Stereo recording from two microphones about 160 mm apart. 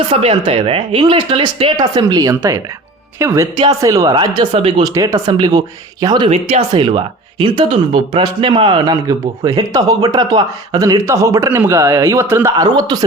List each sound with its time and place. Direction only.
0.1 s speech: 40° right (ahead or behind)